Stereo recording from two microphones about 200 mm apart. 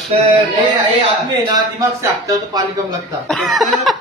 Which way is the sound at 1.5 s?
20° right (ahead or behind).